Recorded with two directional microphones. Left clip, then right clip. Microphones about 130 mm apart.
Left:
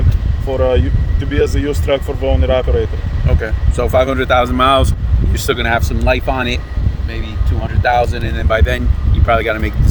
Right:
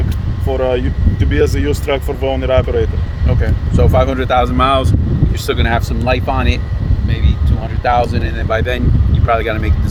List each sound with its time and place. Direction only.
0.4 s speech: 35° right (ahead or behind)
3.2 s speech: 30° left (ahead or behind)
7.8 s speech: 25° left (ahead or behind)